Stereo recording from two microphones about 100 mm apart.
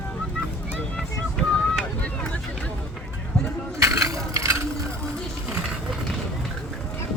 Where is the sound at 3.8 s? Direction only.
35° right (ahead or behind).